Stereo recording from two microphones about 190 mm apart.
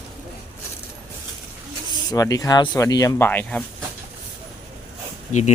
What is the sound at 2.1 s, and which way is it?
Speech, 20° left (ahead or behind).